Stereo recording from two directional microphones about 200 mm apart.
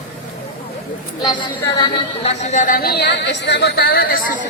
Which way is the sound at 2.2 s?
35° left (ahead or behind).